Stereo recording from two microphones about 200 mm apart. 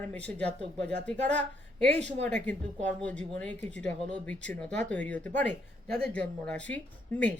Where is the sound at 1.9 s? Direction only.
35° right (ahead or behind).